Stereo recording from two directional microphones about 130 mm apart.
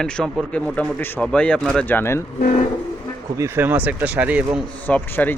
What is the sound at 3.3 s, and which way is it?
Speech, 20° right (ahead or behind).